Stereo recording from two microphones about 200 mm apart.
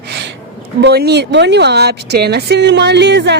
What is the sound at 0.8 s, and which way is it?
Speech, 55° right (ahead or behind).